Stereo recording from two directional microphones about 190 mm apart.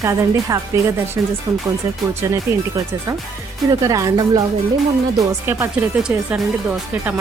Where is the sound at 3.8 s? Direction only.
15° right (ahead or behind).